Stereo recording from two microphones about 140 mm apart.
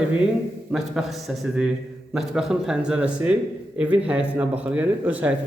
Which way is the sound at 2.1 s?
5° right (ahead or behind).